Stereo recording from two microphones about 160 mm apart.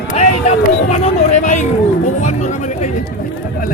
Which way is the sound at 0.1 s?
45° left (ahead or behind).